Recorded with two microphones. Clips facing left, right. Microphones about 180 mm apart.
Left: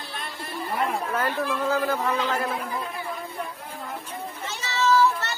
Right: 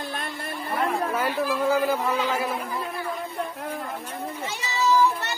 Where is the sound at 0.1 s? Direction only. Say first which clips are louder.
Right 3 dB; 50° right (ahead or behind).